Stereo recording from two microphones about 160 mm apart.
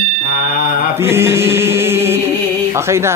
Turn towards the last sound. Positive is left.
turn(degrees=-15)  # may be behind; listen again after turning